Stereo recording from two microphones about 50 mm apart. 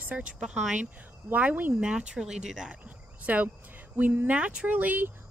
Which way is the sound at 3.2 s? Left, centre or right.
Right.